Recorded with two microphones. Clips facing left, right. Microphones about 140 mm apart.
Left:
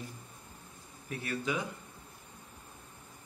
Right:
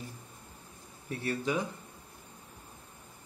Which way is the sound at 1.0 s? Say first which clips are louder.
Right 3 dB; 35° right (ahead or behind).